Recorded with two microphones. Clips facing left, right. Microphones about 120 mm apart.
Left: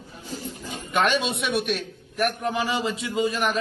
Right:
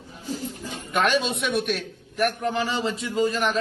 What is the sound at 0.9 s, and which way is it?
A man's voice, centre (ahead or behind).